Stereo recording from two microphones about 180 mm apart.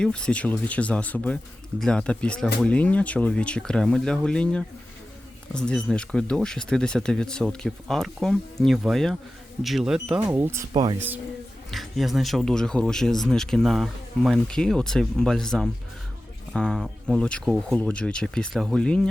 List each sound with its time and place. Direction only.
0.0 s speech: 5° left (ahead or behind)
10.2 s speech: 15° right (ahead or behind)
11.7 s speech: centre (ahead or behind)